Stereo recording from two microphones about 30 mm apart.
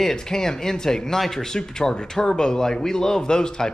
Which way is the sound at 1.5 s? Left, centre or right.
Left.